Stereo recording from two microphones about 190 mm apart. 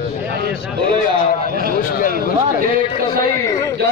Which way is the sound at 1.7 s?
45° left (ahead or behind).